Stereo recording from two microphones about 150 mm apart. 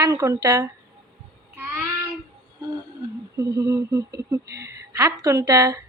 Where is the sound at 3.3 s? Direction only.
20° right (ahead or behind).